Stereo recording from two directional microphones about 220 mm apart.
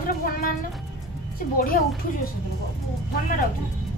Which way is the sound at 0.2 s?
40° left (ahead or behind).